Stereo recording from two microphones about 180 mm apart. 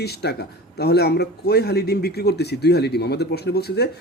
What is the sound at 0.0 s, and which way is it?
A man's voice, 65° left (ahead or behind).